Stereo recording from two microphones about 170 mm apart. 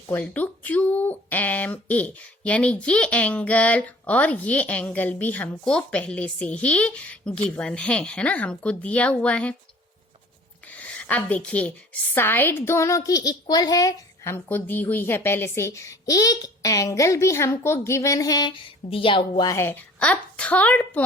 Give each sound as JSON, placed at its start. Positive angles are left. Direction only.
{"t": 0.1, "sound": "speech", "side_deg": 10}
{"t": 10.7, "sound": "a sound", "side_deg": 10}
{"t": 12.1, "sound": "speech", "side_deg": 10}
{"t": 19.5, "sound": "speech", "side_deg": 15}